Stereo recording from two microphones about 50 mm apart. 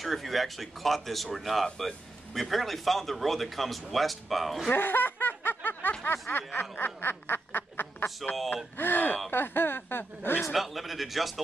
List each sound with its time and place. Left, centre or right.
0.0 s speech: centre
4.7 s snicker: left
8.7 s speech: left
9.3 s snicker: left
10.5 s speech: centre